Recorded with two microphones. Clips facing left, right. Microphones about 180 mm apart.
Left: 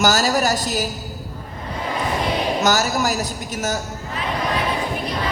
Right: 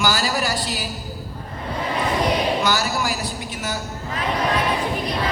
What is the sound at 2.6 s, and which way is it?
Speech, 45° left (ahead or behind).